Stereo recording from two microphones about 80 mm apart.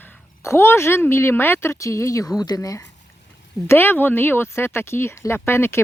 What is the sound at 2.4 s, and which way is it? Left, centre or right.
Speech, left.